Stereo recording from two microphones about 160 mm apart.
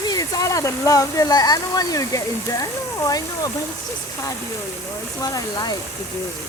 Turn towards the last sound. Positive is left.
turn(degrees=20)  # may be behind; listen again after turning